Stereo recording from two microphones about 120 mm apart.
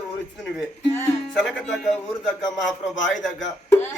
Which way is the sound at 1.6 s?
5° left (ahead or behind).